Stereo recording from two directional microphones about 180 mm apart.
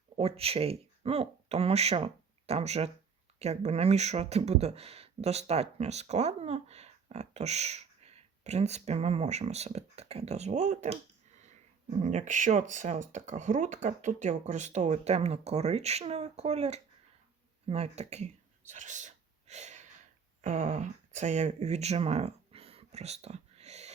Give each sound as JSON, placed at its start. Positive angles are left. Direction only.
{"t": 0.2, "sound": "speech", "side_deg": -35}
{"t": 11.9, "sound": "speech", "side_deg": -40}
{"t": 18.7, "sound": "whispering", "side_deg": -40}
{"t": 20.4, "sound": "speech", "side_deg": -45}